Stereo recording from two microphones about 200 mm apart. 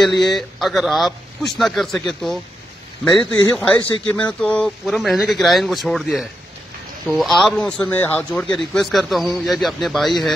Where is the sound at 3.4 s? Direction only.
20° left (ahead or behind).